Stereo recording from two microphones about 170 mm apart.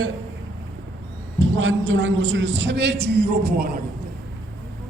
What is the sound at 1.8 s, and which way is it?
A man's voice, 90° right.